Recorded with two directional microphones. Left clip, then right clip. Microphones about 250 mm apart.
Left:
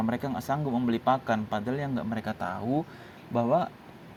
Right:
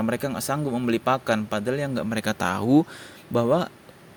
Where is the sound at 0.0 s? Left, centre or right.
Right.